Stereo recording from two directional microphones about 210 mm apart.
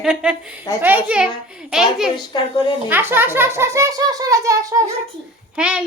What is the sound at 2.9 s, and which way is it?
Speech, 10° right (ahead or behind).